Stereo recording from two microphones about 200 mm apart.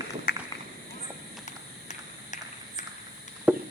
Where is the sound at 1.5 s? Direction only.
35° left (ahead or behind).